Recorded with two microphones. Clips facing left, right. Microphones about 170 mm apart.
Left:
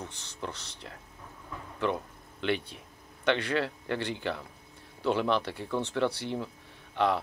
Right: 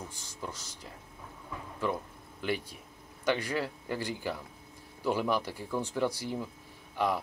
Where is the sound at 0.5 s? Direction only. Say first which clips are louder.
Left 2 dB; 65° left (ahead or behind).